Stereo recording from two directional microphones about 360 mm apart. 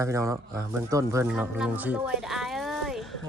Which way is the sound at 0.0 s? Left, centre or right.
Centre.